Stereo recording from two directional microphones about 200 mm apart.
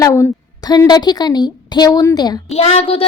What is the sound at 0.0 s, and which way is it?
A woman's voice, 15° left (ahead or behind).